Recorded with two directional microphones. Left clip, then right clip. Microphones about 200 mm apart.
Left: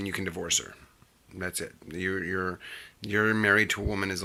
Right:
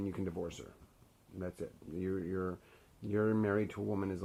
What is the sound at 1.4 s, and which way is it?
Speech, 25° left (ahead or behind).